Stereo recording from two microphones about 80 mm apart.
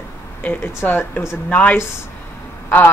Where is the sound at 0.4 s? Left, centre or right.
Left.